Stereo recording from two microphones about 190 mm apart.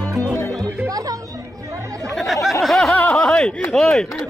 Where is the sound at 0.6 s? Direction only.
15° right (ahead or behind).